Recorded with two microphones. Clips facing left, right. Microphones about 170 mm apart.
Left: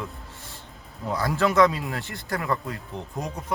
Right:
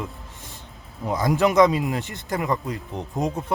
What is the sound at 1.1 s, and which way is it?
Speech, 15° right (ahead or behind).